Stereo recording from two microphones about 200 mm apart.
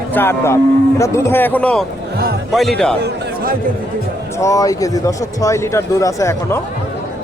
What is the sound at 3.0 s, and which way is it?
Speech, 45° right (ahead or behind).